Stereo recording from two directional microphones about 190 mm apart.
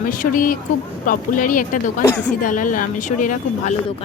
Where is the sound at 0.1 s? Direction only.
45° left (ahead or behind).